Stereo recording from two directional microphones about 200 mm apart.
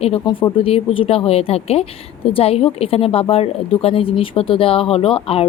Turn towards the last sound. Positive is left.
turn(degrees=30)  # may be behind; listen again after turning